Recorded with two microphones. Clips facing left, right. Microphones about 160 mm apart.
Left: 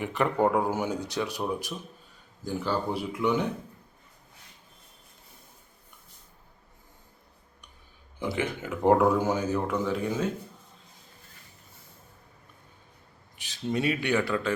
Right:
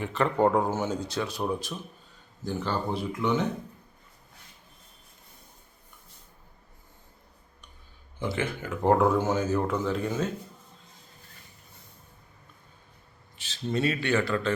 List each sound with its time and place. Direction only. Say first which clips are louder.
0.0 s speech: right 1 dB; 15° left (ahead or behind)
8.2 s speech: even; 15° left (ahead or behind)
13.3 s a man's voice: even; 15° left (ahead or behind)